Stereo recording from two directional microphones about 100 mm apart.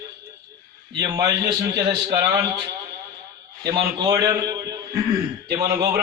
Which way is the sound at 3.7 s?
50° right (ahead or behind).